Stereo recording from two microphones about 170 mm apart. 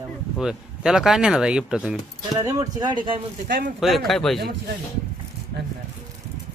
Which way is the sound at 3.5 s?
55° right (ahead or behind).